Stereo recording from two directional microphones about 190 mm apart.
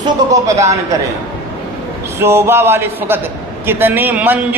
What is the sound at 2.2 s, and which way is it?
A man's voice, 15° right (ahead or behind).